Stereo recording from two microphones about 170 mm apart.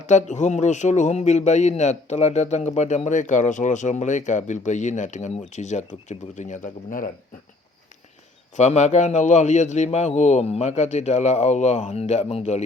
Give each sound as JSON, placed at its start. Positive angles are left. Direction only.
{"t": 0.0, "sound": "a man's voice", "side_deg": 45}
{"t": 8.5, "sound": "a man's voice", "side_deg": 45}